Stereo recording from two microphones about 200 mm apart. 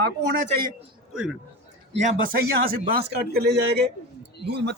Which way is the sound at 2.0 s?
45° right (ahead or behind).